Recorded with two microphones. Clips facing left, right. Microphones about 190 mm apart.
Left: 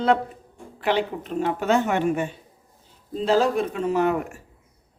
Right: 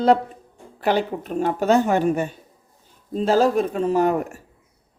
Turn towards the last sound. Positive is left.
turn(degrees=-40)  # may be behind; listen again after turning